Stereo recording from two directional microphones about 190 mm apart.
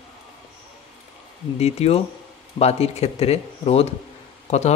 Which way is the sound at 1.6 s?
35° left (ahead or behind).